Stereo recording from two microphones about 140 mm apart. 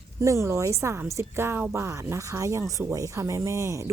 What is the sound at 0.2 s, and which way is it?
A woman's voice, 20° right (ahead or behind).